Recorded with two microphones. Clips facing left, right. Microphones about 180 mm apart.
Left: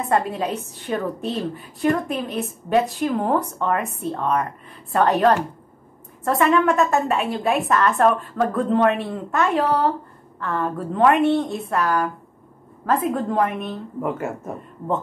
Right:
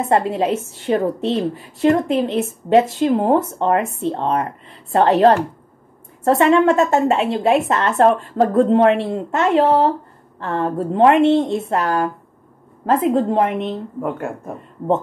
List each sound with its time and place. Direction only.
0.0 s a woman's voice: 25° right (ahead or behind)
6.2 s a woman's voice: 25° right (ahead or behind)
14.0 s speech: centre (ahead or behind)